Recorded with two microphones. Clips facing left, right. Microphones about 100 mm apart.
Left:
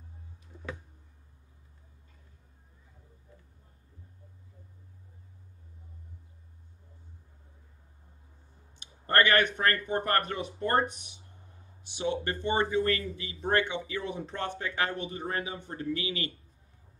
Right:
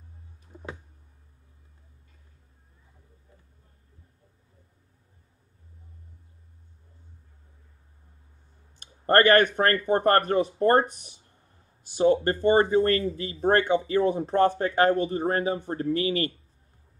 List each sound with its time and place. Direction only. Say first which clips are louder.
0.5 s a sound: right 4 dB; 35° right (ahead or behind)
8.7 s clicking: right 6 dB; 40° right (ahead or behind)
9.6 s speech: right 6 dB; 40° right (ahead or behind)